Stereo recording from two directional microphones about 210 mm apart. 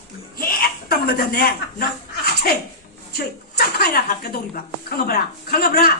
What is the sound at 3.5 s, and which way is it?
A man's voice, 50° left (ahead or behind).